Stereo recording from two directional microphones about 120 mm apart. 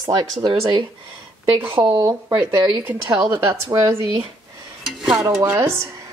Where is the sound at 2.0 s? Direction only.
30° right (ahead or behind).